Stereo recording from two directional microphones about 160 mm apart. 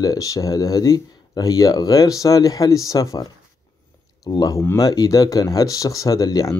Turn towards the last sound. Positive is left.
turn(degrees=20)  # may be behind; listen again after turning